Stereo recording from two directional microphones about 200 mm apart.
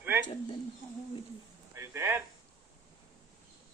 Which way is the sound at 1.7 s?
15° right (ahead or behind).